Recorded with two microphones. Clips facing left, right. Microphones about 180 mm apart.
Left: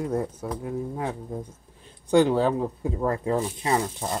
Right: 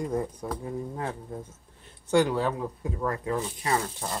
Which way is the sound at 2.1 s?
25° left (ahead or behind).